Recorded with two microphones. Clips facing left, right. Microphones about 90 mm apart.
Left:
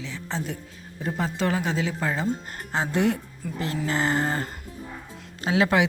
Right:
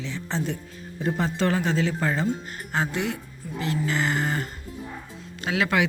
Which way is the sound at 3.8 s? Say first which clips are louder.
Left 3 dB; 35° left (ahead or behind).